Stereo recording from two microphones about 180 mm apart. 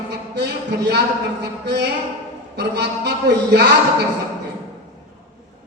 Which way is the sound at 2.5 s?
65° right (ahead or behind).